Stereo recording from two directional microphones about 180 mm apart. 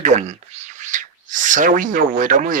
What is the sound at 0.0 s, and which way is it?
Speech, 40° right (ahead or behind).